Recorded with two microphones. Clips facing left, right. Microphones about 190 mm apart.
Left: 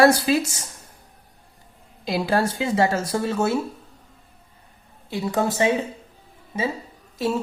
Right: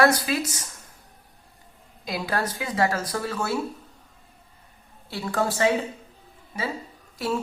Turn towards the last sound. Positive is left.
turn(degrees=20)  # may be behind; listen again after turning